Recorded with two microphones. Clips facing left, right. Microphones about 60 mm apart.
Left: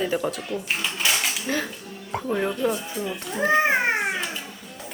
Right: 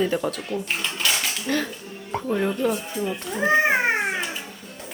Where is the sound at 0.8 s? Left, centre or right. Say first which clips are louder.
Even; centre.